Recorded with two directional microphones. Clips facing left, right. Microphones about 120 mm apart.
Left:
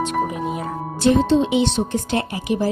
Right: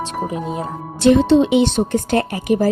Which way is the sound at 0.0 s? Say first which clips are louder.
Left 1 dB; 30° right (ahead or behind).